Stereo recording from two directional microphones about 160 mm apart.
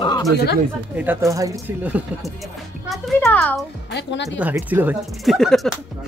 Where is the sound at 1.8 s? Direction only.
10° right (ahead or behind).